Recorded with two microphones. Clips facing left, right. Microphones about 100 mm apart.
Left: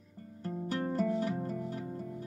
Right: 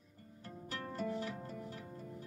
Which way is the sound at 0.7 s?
35° left (ahead or behind).